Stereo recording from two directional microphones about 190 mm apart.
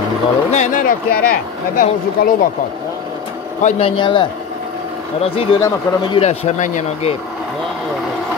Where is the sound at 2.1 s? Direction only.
50° left (ahead or behind).